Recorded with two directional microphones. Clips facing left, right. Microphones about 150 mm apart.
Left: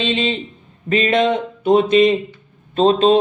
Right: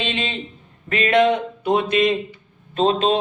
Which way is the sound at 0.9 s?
25° left (ahead or behind).